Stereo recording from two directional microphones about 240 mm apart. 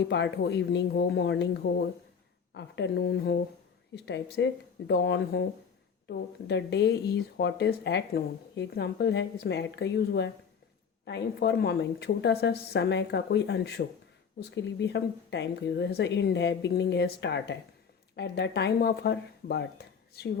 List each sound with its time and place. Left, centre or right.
0.0 s speech: left